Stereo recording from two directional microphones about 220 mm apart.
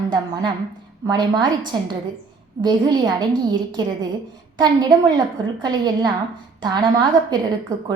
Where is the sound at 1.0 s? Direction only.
20° right (ahead or behind).